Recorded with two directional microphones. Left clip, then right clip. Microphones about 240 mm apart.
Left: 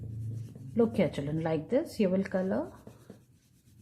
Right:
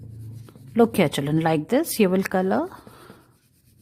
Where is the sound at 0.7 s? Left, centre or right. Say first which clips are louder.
Right 9 dB; right.